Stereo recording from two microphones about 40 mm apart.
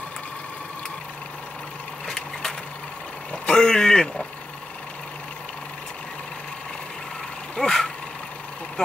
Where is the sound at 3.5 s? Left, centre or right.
Centre.